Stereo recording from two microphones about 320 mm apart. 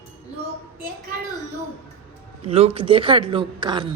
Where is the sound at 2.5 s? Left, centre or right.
Centre.